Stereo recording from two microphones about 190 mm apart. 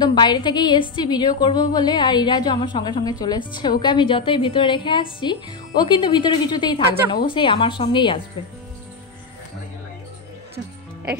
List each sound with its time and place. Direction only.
0.0 s a woman's voice: 20° left (ahead or behind)